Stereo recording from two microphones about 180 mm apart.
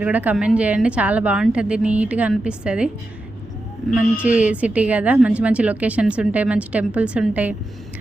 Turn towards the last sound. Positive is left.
turn(degrees=-5)  # may be behind; listen again after turning